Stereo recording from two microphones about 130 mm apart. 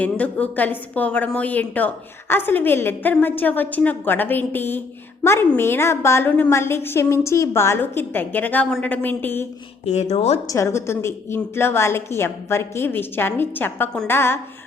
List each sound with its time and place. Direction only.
0.0 s a woman's voice: 10° left (ahead or behind)
9.8 s speech: 55° left (ahead or behind)
10.4 s a woman's voice: 25° left (ahead or behind)